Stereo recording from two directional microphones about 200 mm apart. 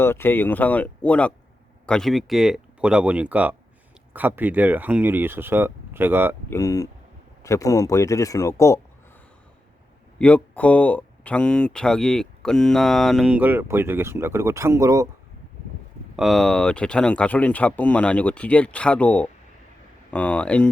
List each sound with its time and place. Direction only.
0.0 s speech: 10° left (ahead or behind); by 6.3 s 10° right (ahead or behind)
6.5 s speech: 15° left (ahead or behind)
10.2 s speech: 5° left (ahead or behind); by 15.0 s 15° right (ahead or behind)
16.1 s speech: centre (ahead or behind)